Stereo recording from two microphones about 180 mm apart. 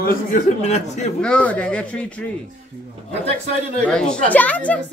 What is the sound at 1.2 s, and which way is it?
A child's voice, 5° left (ahead or behind).